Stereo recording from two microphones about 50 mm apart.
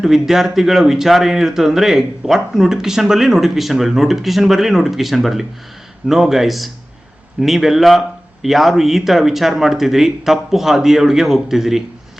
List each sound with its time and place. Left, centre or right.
0.0 s speech: centre